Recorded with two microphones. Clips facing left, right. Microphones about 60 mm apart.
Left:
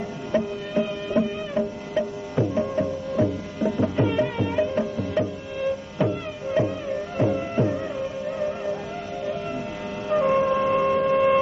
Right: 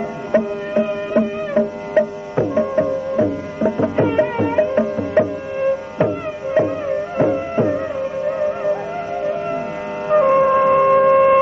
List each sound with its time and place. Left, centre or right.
0.3 s music: right
2.3 s music: right